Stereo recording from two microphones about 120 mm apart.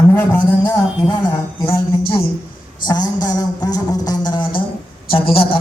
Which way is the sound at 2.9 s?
35° left (ahead or behind).